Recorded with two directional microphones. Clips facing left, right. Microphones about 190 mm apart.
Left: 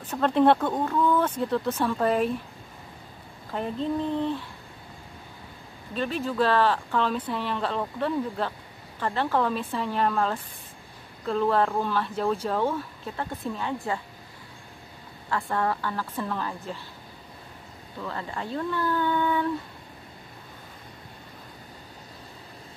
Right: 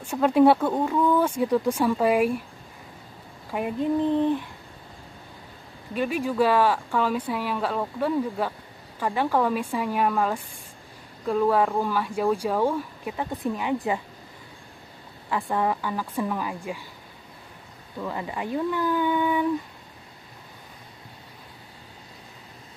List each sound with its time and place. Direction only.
0.0 s speech: 10° right (ahead or behind)
3.5 s speech: 15° right (ahead or behind)
5.9 s speech: 10° right (ahead or behind)
15.2 s speech: 15° right (ahead or behind)
18.0 s speech: 15° right (ahead or behind)